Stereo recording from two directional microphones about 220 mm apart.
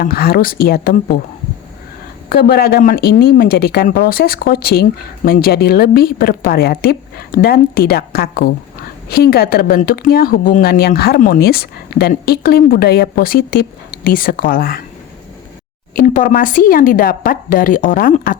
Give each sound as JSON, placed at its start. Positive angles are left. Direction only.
{"t": 0.0, "sound": "speech", "side_deg": 45}
{"t": 2.3, "sound": "speech", "side_deg": 45}
{"t": 16.0, "sound": "speech", "side_deg": 35}